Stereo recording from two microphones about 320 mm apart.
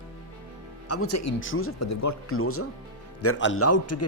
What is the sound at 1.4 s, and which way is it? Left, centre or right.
Speech, left.